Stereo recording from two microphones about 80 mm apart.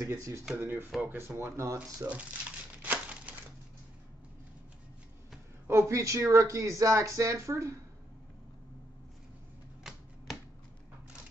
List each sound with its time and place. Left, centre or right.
0.1 s speech: right
0.6 s speech: right
2.8 s crumpling: right
5.7 s speech: right
9.8 s typewriter: centre